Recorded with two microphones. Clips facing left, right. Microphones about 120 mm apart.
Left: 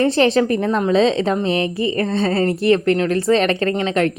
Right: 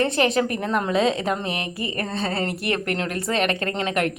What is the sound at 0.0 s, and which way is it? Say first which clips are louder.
A woman's voice: left 5 dB; 30° left (ahead or behind).